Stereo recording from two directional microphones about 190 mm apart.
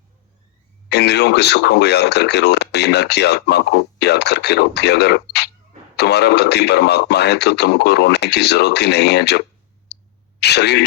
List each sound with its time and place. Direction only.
0.9 s speech: 60° left (ahead or behind)
9.9 s a sound: 60° left (ahead or behind)
10.4 s speech: 60° left (ahead or behind)